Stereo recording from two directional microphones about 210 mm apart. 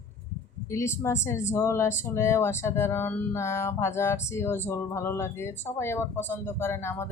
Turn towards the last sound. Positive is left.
turn(degrees=10)  # may be behind; listen again after turning